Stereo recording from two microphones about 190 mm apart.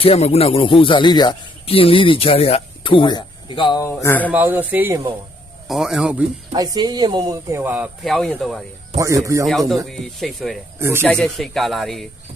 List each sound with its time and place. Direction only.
0.0 s speech: 30° left (ahead or behind)
4.0 s speech: 10° left (ahead or behind)
4.3 s speech: 10° right (ahead or behind)
5.6 s speech: centre (ahead or behind)
6.5 s speech: 20° right (ahead or behind); by 8.6 s centre (ahead or behind)
9.0 s speech: 15° right (ahead or behind)
9.5 s speech: centre (ahead or behind)
10.8 s speech: 15° right (ahead or behind)
11.0 s speech: 5° left (ahead or behind)